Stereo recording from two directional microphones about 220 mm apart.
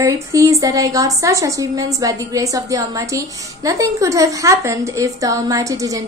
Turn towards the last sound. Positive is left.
turn(degrees=-15)  # may be behind; listen again after turning